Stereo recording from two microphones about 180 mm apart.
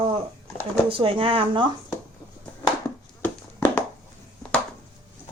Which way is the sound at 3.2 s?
10° left (ahead or behind).